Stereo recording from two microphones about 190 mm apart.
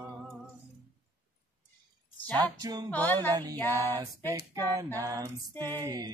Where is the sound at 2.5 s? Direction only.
20° right (ahead or behind).